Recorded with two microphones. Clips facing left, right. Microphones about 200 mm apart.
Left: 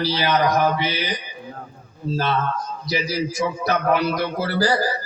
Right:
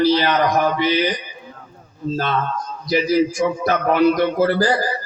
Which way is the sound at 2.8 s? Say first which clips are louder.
Right 8 dB; 45° right (ahead or behind).